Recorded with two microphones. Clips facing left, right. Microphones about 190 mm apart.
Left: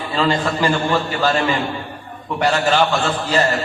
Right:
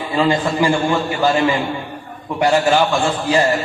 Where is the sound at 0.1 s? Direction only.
15° right (ahead or behind).